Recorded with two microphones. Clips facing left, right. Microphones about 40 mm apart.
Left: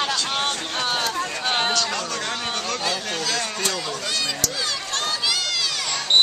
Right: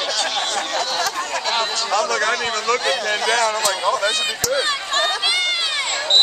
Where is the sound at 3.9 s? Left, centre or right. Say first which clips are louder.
Right 7 dB; right.